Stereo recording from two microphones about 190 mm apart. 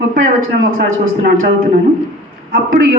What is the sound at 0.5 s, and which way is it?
Speech, 60° right (ahead or behind).